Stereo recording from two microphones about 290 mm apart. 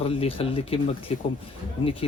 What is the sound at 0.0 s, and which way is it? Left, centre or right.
A man's voice, centre.